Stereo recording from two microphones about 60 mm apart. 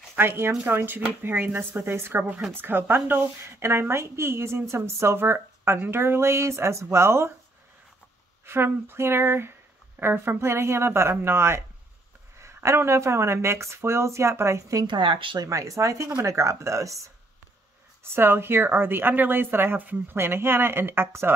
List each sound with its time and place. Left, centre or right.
0.1 s a woman's voice: right
8.5 s a woman's voice: right
12.6 s a woman's voice: right
18.1 s a woman's voice: right